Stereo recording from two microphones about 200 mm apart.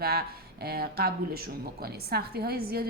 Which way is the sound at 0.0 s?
50° right (ahead or behind).